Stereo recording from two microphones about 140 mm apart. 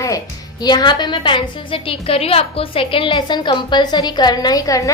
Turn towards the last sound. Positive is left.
turn(degrees=25)  # may be behind; listen again after turning